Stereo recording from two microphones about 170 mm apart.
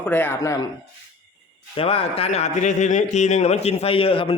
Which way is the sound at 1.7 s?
35° left (ahead or behind).